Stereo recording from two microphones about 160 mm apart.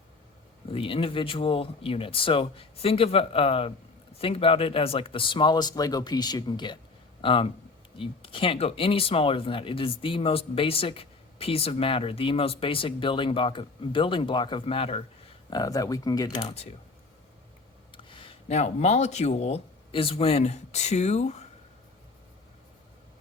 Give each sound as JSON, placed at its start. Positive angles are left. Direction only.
{"t": 0.7, "sound": "speech", "side_deg": 35}
{"t": 15.4, "sound": "speech", "side_deg": 25}
{"t": 17.9, "sound": "speech", "side_deg": 30}